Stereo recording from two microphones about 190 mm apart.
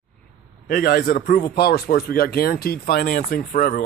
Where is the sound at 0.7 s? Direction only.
50° left (ahead or behind).